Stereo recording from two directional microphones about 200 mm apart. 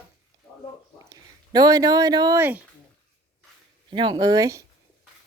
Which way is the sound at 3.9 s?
20° right (ahead or behind).